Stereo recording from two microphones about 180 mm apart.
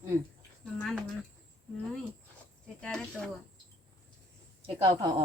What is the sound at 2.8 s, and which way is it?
Speech, 5° left (ahead or behind).